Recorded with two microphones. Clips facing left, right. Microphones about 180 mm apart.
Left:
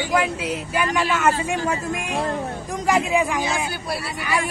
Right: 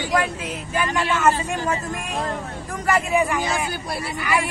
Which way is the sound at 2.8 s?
10° left (ahead or behind).